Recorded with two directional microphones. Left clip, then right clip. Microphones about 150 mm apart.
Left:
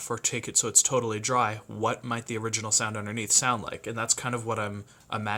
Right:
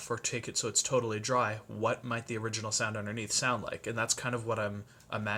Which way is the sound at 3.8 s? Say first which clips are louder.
Left 3 dB; 20° left (ahead or behind).